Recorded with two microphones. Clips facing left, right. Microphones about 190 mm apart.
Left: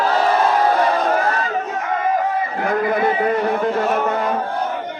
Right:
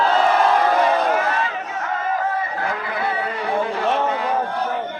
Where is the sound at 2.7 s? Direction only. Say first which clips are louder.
Left 7 dB; 50° left (ahead or behind).